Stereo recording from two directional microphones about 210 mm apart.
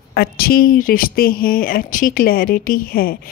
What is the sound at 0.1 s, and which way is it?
Speech, 45° left (ahead or behind).